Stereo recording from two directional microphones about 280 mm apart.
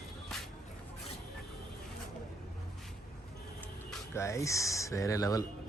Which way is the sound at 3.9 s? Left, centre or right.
Centre.